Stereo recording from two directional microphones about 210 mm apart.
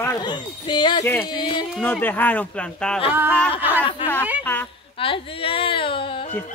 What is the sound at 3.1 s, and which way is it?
Speech, 10° right (ahead or behind).